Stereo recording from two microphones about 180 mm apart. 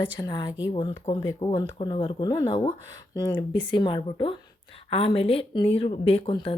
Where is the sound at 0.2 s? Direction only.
20° left (ahead or behind).